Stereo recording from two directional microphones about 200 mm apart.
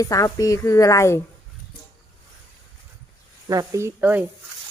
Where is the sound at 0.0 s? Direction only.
15° left (ahead or behind).